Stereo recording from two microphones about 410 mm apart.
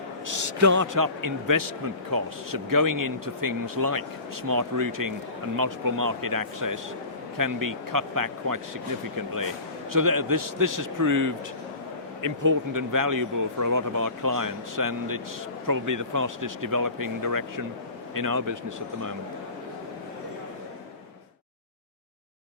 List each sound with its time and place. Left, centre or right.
0.3 s a man's voice: right